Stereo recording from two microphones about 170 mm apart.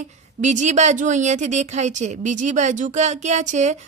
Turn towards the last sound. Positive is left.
turn(degrees=-45)  # may be behind; listen again after turning